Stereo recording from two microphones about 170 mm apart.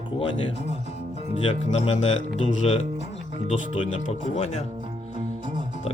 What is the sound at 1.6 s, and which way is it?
Speech, 40° left (ahead or behind).